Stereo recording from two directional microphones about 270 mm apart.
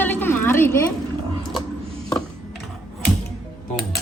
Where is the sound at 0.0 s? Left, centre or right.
Centre.